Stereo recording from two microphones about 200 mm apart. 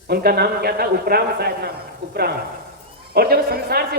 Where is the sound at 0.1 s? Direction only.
50° right (ahead or behind).